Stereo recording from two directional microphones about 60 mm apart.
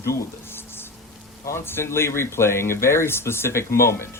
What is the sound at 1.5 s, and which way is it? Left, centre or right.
Speech, left.